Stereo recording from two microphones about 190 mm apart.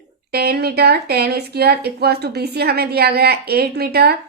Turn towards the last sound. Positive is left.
turn(degrees=-55)  # may be behind; listen again after turning